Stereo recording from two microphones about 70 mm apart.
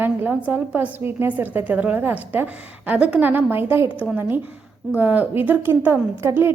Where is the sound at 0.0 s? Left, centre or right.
Right.